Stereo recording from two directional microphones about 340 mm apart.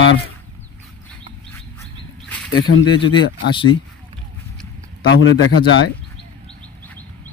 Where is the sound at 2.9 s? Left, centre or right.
Centre.